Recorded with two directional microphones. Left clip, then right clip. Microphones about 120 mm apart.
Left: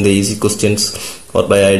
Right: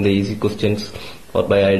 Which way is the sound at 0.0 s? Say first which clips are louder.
Left 5 dB; 15° left (ahead or behind).